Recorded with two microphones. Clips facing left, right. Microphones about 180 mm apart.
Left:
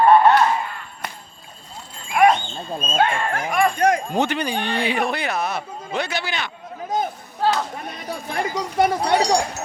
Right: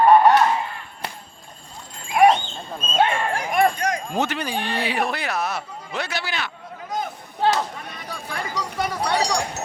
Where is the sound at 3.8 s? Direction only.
30° left (ahead or behind).